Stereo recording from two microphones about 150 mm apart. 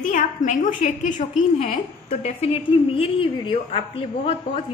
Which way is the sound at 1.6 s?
45° left (ahead or behind).